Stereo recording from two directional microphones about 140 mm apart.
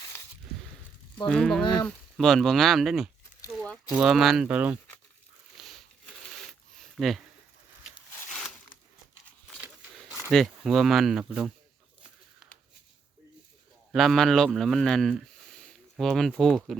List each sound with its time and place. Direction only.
1.3 s speech: 5° left (ahead or behind)
1.6 s speech: 30° left (ahead or behind)
2.1 s speech: centre (ahead or behind)
5.5 s a sound: centre (ahead or behind)
10.6 s speech: centre (ahead or behind)
13.9 s speech: centre (ahead or behind)